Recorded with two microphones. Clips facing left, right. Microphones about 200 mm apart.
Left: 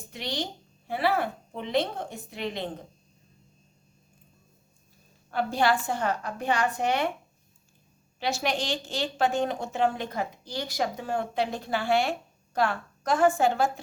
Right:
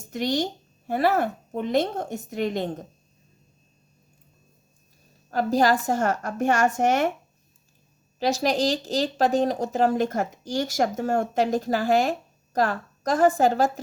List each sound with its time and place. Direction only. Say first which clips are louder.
0.1 s a woman's voice: right 8 dB; 45° right (ahead or behind)
5.3 s a woman's voice: right 4 dB; 40° right (ahead or behind)
8.2 s speech: right 7 dB; 40° right (ahead or behind)